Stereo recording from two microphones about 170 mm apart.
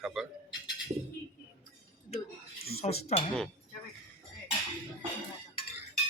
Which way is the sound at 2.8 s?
40° left (ahead or behind).